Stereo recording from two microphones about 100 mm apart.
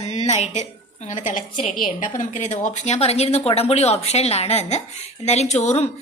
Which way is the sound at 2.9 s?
90° left.